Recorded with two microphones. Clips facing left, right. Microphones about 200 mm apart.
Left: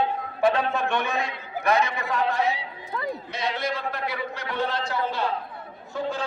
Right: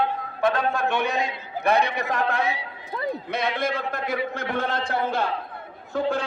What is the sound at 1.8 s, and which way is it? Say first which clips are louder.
Speech: right 2 dB; 70° right (ahead or behind).